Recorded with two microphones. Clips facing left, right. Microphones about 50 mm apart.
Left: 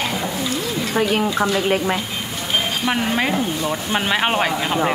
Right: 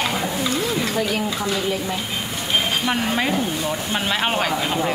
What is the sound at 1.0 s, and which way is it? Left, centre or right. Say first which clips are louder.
Speech: left 4 dB; left.